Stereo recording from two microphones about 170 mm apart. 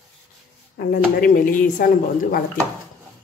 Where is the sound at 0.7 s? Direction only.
55° left (ahead or behind).